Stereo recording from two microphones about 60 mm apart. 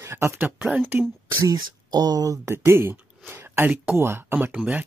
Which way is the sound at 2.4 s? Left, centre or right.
Right.